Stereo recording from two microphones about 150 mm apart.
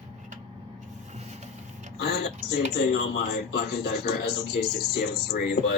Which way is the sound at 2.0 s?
90° left.